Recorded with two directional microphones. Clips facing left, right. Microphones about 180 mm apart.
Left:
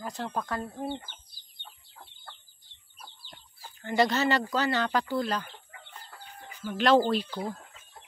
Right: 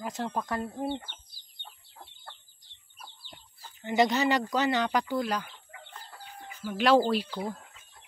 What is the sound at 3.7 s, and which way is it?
Speech, 20° right (ahead or behind).